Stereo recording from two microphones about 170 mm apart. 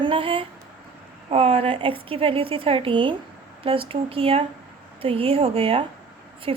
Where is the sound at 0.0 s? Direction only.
30° right (ahead or behind).